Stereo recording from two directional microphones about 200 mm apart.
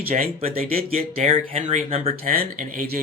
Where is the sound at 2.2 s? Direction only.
45° right (ahead or behind).